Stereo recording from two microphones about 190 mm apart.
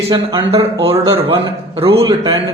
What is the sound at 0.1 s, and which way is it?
A man's voice, 25° right (ahead or behind).